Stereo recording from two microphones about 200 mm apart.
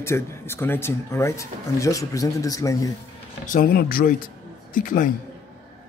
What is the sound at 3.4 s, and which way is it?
Speech, 45° left (ahead or behind).